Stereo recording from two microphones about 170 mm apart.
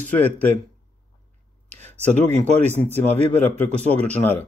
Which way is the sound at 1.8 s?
40° right (ahead or behind).